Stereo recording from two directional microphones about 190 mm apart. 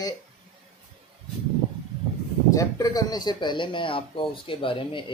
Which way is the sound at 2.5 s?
20° left (ahead or behind).